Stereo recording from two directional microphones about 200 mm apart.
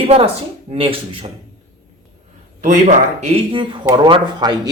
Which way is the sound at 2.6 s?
40° right (ahead or behind).